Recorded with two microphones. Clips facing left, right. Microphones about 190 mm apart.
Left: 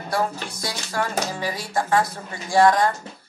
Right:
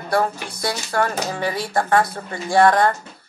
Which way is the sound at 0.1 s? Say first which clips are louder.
Right 4 dB; 60° right (ahead or behind).